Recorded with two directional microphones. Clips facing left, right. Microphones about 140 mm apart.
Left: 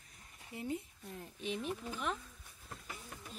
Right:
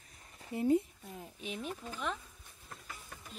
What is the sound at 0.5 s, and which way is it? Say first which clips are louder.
Speech: right 10 dB; 35° right (ahead or behind).